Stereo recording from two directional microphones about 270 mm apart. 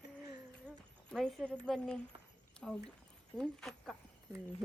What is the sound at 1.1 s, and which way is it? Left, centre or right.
A woman's voice, centre.